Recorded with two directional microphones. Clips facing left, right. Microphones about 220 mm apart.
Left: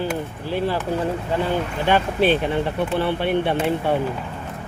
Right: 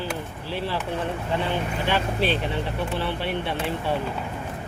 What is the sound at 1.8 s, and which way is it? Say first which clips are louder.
Speech: left 7 dB; 50° left (ahead or behind).